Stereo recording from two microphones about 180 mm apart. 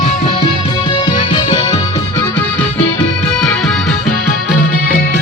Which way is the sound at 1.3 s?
25° left (ahead or behind).